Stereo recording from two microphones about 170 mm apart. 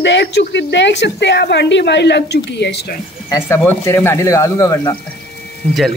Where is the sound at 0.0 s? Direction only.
90° left.